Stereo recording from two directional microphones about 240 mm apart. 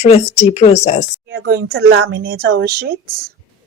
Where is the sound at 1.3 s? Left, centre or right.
Right.